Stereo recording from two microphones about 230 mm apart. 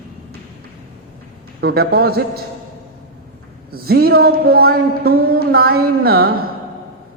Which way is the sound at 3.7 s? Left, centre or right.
Right.